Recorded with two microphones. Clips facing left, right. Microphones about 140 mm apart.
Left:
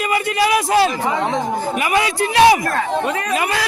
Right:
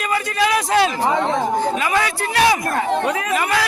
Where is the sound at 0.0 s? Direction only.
10° left (ahead or behind).